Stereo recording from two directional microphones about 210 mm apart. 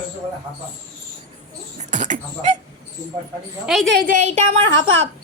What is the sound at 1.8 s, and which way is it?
Beatboxing, 35° right (ahead or behind).